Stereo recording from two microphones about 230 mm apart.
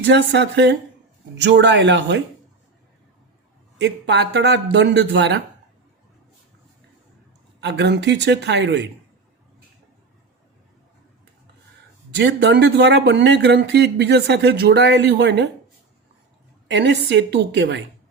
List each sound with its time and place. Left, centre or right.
0.1 s speech: right
3.8 s speech: right
7.6 s speech: right
12.1 s speech: right
16.7 s speech: right